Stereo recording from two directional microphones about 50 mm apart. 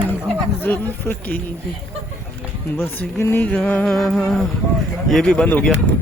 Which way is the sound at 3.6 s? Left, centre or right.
Left.